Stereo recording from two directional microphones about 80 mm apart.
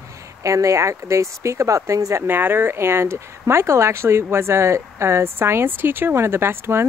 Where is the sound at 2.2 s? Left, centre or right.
Right.